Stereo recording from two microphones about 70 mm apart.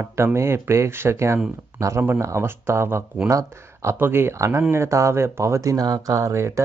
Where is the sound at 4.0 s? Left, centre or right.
Right.